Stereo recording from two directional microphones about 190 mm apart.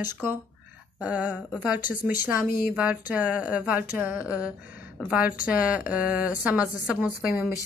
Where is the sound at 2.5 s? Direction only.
50° left (ahead or behind).